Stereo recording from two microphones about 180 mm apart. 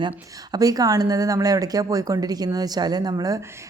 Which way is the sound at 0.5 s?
20° right (ahead or behind).